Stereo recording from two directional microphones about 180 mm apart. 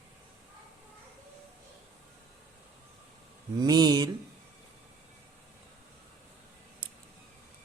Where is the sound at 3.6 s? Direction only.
20° right (ahead or behind).